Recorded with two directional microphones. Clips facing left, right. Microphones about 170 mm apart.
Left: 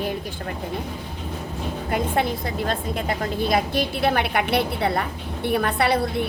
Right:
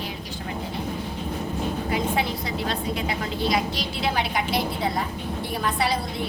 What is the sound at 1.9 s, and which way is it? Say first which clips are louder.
A woman's voice: left 5 dB; 50° left (ahead or behind).